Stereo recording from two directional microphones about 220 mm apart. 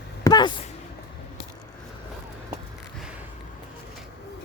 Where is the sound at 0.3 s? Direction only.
20° left (ahead or behind).